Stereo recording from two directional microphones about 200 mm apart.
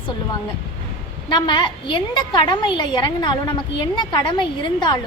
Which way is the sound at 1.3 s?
25° left (ahead or behind).